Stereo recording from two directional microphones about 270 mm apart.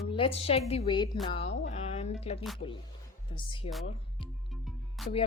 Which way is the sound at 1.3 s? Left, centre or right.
Left.